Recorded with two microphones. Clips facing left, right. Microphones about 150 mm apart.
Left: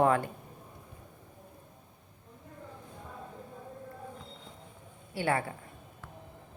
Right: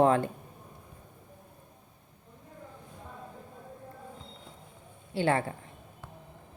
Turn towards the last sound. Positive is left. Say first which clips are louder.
# right 3 dB
turn(degrees=-30)  # may be behind; listen again after turning